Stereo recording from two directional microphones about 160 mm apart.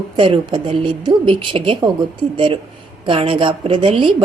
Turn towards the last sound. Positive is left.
turn(degrees=-30)  # may be behind; listen again after turning